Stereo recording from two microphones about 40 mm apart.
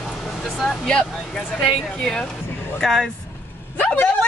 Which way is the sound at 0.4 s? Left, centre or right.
Centre.